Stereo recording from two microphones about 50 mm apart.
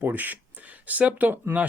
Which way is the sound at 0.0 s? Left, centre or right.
Right.